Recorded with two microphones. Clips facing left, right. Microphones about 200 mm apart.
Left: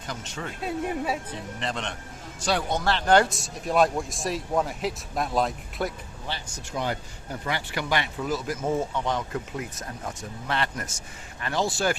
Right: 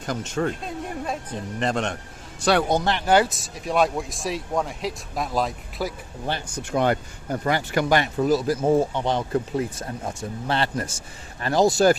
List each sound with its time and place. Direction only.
0.0 s speech: 50° right (ahead or behind)
0.6 s speech: 5° left (ahead or behind)
1.5 s speech: 45° right (ahead or behind)
2.4 s a man's voice: 65° right (ahead or behind)
2.8 s speech: 10° right (ahead or behind)
6.2 s speech: 55° right (ahead or behind)